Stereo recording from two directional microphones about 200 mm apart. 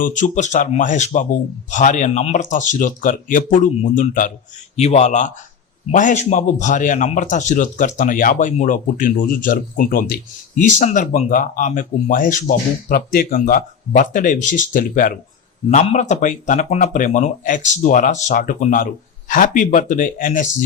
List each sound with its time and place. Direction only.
0.0 s a man's voice: 40° left (ahead or behind)